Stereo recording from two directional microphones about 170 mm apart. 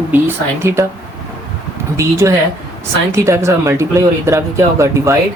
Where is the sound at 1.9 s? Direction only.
15° right (ahead or behind).